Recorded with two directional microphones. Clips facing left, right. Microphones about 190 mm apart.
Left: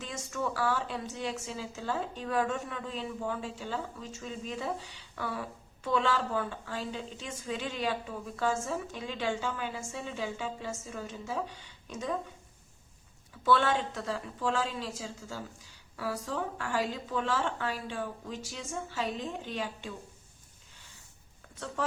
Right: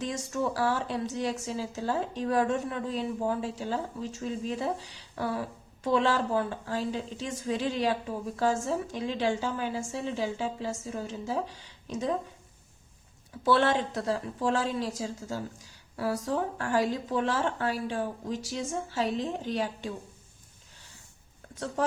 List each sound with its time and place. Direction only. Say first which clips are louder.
0.0 s a woman's voice: right 5 dB; 35° right (ahead or behind)
13.4 s a woman's voice: right 3 dB; 35° right (ahead or behind)
16.0 s a woman's voice: right 5 dB; 40° right (ahead or behind)